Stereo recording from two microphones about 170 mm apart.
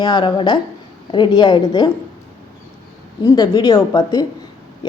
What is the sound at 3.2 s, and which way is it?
Speech, 20° left (ahead or behind).